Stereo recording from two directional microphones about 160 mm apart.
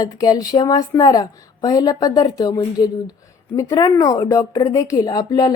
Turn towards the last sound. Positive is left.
turn(degrees=25)  # may be behind; listen again after turning